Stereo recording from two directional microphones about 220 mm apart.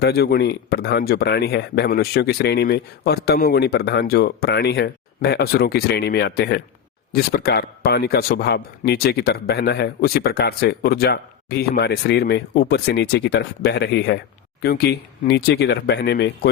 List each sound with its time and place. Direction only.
0.0 s speech: 45° left (ahead or behind)